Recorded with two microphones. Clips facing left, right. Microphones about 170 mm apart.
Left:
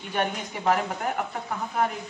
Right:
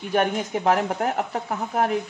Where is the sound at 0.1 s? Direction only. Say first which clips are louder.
Right 6 dB; 50° right (ahead or behind).